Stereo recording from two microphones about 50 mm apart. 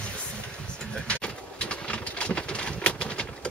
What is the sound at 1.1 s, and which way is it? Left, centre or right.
Pigeon, left.